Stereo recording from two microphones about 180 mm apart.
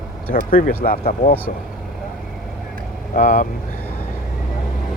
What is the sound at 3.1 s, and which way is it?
Speech, 50° left (ahead or behind).